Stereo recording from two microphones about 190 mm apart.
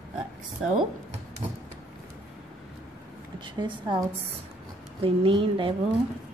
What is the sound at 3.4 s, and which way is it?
A woman's voice, 25° right (ahead or behind).